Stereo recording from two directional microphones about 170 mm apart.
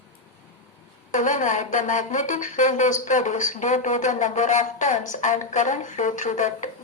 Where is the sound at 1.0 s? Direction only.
50° left (ahead or behind).